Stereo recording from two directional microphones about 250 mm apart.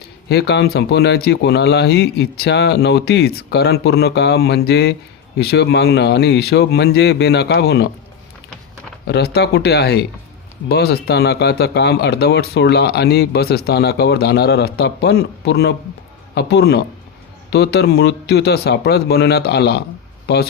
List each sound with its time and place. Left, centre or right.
0.3 s speech: left
9.0 s speech: left